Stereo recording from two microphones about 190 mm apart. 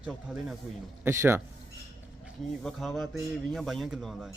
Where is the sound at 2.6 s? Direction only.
Centre (ahead or behind).